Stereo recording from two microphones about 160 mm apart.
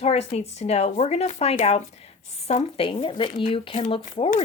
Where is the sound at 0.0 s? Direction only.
40° left (ahead or behind).